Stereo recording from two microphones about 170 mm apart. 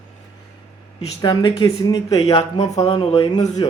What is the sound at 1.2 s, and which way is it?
Speech, 25° left (ahead or behind).